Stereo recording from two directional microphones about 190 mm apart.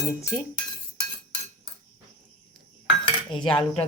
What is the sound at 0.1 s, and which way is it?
Speech, 15° left (ahead or behind).